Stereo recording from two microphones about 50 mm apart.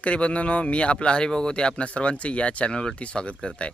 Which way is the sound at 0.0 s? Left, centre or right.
Left.